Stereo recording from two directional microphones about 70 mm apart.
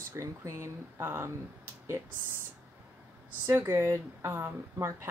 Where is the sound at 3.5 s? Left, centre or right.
Right.